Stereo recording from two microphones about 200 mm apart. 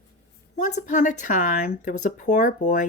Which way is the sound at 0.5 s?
40° left (ahead or behind).